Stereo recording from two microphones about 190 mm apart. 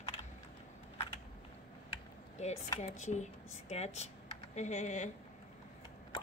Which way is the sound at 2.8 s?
40° left (ahead or behind).